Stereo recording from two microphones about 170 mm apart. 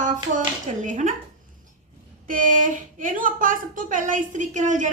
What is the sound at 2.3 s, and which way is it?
Speech, 50° right (ahead or behind).